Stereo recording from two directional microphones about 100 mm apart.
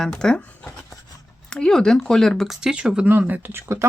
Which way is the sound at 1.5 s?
5° left (ahead or behind).